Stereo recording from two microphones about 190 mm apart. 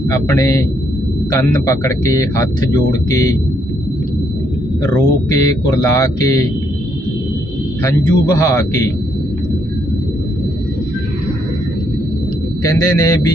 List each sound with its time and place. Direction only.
0.1 s speech: 15° left (ahead or behind)
5.3 s speech: 20° left (ahead or behind)
7.9 s speech: 20° left (ahead or behind)
12.6 s speech: 20° left (ahead or behind)